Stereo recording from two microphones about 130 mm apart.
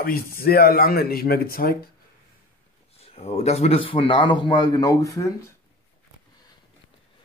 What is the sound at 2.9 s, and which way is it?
Speech, 50° left (ahead or behind).